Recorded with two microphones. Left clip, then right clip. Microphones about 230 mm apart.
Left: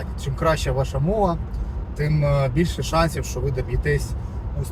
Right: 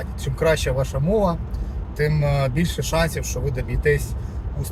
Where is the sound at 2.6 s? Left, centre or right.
Centre.